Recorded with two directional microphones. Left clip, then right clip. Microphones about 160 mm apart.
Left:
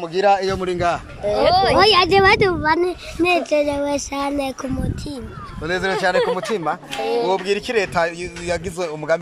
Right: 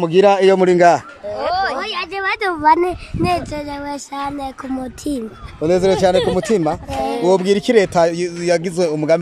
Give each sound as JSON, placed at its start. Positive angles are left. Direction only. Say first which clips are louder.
{"t": 0.0, "sound": "speech", "louder": "right 5 dB", "side_deg": -55}
{"t": 1.5, "sound": "a sound", "louder": "left 2 dB", "side_deg": 15}
{"t": 1.8, "sound": "speech", "louder": "left 10 dB", "side_deg": 45}
{"t": 2.5, "sound": "a child's voice", "louder": "right 5 dB", "side_deg": -15}
{"t": 3.2, "sound": "speech", "louder": "left 4 dB", "side_deg": -5}
{"t": 5.0, "sound": "speech", "louder": "right 7 dB", "side_deg": -40}